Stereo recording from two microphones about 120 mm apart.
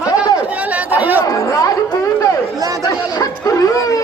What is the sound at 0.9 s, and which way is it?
Speech, 15° right (ahead or behind).